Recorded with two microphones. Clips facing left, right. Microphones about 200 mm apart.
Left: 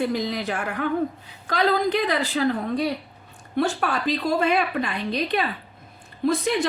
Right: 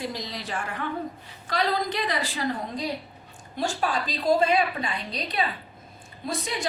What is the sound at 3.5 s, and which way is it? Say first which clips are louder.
A woman's voice: left 4 dB; 60° left (ahead or behind).